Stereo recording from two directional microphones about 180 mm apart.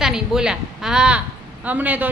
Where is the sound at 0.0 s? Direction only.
5° right (ahead or behind).